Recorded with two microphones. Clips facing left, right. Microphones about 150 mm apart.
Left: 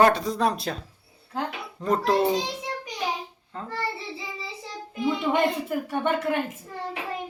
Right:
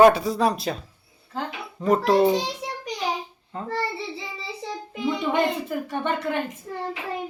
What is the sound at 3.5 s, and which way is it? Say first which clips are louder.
Speech: right 3 dB; 15° right (ahead or behind).